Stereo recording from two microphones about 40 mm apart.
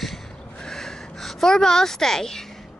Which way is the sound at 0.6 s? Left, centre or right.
Centre.